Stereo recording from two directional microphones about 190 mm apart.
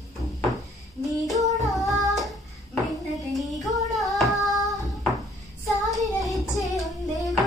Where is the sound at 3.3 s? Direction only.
Centre (ahead or behind).